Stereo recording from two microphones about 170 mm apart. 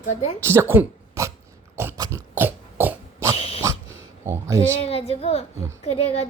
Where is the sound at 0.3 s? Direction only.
15° right (ahead or behind).